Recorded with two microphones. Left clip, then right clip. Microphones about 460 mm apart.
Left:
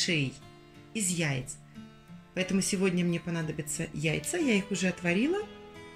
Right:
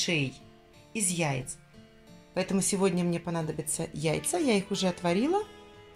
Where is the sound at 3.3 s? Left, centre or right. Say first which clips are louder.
Right 2 dB; centre.